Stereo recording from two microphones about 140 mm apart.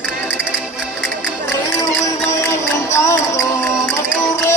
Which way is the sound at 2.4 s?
20° left (ahead or behind).